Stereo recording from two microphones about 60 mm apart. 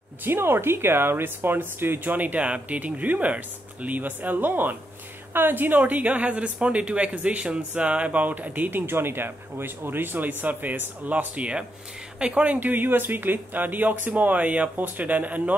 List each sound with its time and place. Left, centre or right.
0.2 s speech: right; by 12.5 s centre
12.5 s speech: right